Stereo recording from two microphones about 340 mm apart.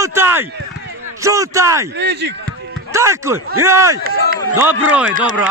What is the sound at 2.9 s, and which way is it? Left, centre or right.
A man's voice, centre.